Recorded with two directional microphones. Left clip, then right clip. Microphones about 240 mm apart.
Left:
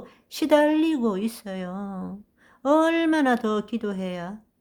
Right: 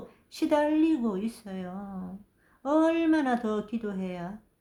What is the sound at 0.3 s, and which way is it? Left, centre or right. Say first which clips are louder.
Speech: left 6 dB; left.